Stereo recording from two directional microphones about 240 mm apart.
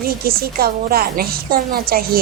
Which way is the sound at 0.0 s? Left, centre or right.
Right.